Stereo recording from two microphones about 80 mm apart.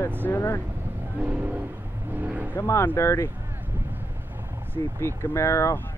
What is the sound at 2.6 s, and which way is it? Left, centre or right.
Speech, left.